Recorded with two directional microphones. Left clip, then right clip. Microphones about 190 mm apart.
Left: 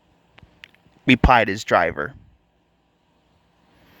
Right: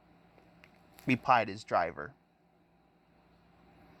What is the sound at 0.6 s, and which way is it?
Speech, 50° left (ahead or behind).